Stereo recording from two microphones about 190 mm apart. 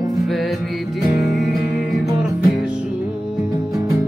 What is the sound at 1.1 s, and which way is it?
Music, centre (ahead or behind).